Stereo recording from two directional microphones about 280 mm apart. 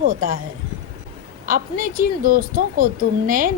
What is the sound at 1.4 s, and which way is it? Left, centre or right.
A woman's voice, right.